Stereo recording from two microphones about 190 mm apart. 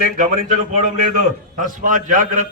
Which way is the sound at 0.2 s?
45° right (ahead or behind).